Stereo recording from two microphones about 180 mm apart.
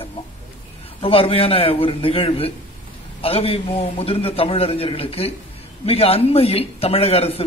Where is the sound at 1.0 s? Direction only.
30° left (ahead or behind).